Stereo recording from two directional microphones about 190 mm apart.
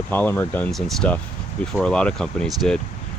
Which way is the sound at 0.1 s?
10° left (ahead or behind).